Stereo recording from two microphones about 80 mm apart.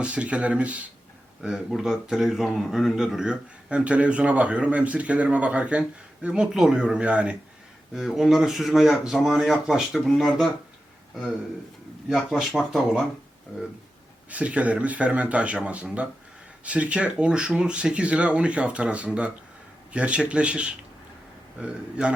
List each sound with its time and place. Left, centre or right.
0.0 s speech: centre
7.9 s speech: centre
12.1 s speech: centre
14.3 s speech: centre